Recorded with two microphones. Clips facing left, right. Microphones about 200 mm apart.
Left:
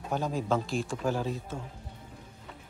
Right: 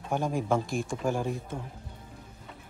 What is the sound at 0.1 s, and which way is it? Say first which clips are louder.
A man's voice: right 2 dB; 15° right (ahead or behind).